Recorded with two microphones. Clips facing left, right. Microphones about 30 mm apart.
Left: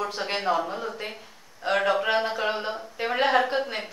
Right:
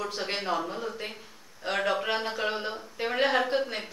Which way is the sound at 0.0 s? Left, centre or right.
Centre.